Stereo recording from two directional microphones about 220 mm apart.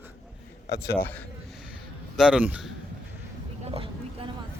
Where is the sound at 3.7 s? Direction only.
25° right (ahead or behind).